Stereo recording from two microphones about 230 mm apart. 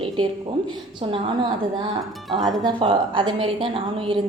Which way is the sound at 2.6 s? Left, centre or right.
Right.